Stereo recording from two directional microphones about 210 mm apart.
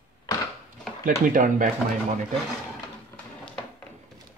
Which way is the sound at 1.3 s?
40° right (ahead or behind).